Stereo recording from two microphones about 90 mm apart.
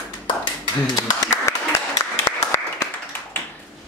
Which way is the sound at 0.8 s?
40° left (ahead or behind).